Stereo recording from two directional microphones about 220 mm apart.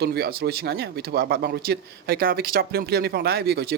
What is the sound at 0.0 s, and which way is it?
Speech, 45° right (ahead or behind).